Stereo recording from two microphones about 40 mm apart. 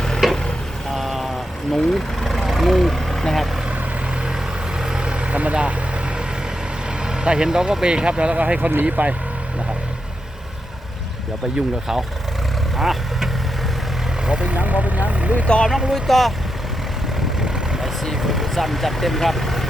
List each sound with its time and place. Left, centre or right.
0.2 s vehicle: centre
2.5 s speech: centre
4.8 s vehicle: centre; by 5.7 s right
7.1 s speech: centre; by 9.1 s right
12.7 s vehicle: centre
14.3 s speech: right
14.5 s speech: right
15.9 s speech: centre
18.1 s speech: centre